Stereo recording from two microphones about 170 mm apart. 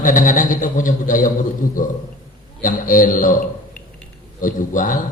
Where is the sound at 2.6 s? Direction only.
50° left (ahead or behind).